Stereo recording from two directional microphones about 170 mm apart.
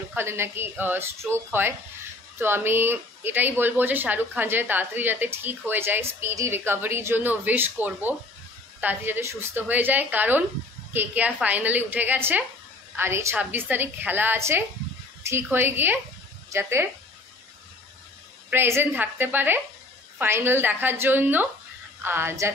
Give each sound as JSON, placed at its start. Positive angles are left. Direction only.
{"t": 0.1, "sound": "speech", "side_deg": -15}
{"t": 18.5, "sound": "speech", "side_deg": -15}